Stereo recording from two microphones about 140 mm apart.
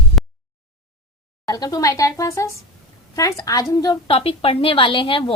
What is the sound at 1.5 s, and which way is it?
Speech, 25° left (ahead or behind).